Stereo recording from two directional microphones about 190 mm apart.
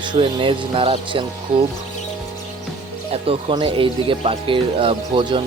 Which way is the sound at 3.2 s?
30° right (ahead or behind).